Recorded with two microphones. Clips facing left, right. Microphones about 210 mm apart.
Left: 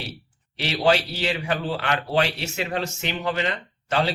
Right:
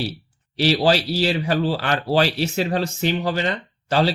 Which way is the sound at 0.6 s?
35° right (ahead or behind).